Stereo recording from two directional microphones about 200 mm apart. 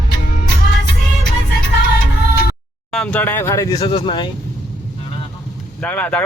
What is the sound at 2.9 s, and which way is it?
Speech, 5° left (ahead or behind).